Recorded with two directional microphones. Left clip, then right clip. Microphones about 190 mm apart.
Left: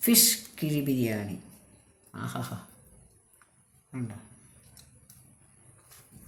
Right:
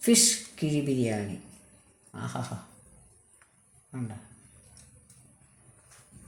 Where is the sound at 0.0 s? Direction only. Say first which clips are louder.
Right 1 dB; 20° right (ahead or behind).